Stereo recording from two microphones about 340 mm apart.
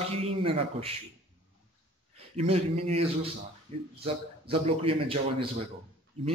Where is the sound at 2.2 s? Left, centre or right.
Centre.